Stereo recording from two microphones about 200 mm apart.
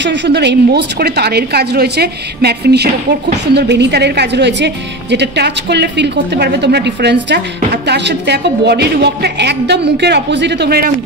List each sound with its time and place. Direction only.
0.0 s a woman's voice: 60° right (ahead or behind)